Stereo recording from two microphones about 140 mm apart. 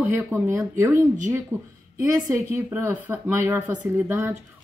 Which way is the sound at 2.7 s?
10° right (ahead or behind).